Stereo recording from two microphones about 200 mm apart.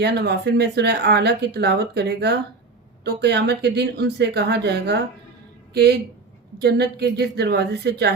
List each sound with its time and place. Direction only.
0.0 s speech: 55° right (ahead or behind)
6.6 s speech: 55° right (ahead or behind)